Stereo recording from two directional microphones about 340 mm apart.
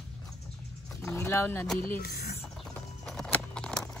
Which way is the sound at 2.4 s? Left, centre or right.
Centre.